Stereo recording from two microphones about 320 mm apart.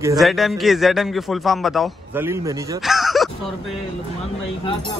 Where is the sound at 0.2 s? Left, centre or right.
Centre.